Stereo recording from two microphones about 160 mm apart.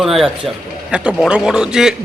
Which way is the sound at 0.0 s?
Centre (ahead or behind).